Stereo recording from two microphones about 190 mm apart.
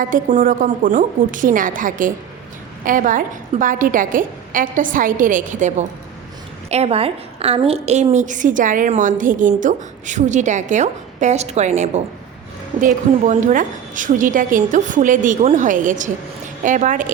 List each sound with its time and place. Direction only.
0.0 s a woman's voice: 40° right (ahead or behind)